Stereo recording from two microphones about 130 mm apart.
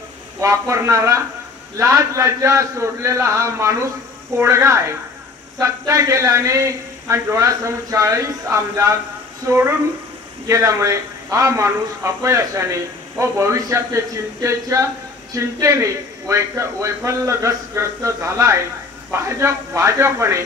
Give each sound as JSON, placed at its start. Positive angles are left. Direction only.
{"t": 0.4, "sound": "a man's voice", "side_deg": -25}